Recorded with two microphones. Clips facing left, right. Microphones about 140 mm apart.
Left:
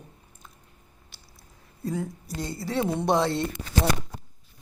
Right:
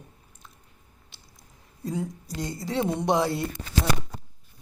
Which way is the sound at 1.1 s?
15° right (ahead or behind).